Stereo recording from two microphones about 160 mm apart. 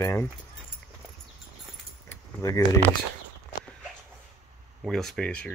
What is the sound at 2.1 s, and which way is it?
Keys jangling, 20° left (ahead or behind).